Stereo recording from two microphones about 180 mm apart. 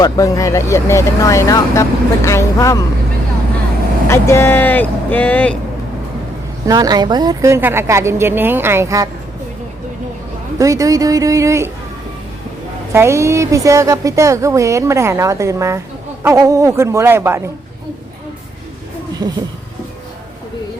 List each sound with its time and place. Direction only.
0.0 s speech: 20° left (ahead or behind)
4.1 s speech: 15° left (ahead or behind)
6.7 s a woman's voice: 20° right (ahead or behind)
10.6 s speech: 20° right (ahead or behind)
12.9 s a woman's voice: 15° right (ahead or behind)
19.2 s speech: 25° right (ahead or behind)